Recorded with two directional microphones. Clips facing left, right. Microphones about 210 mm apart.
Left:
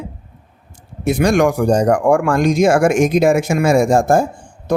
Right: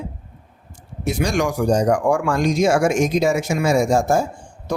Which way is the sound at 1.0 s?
55° left (ahead or behind).